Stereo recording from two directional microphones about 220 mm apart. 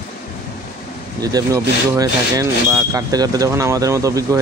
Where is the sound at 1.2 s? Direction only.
15° right (ahead or behind).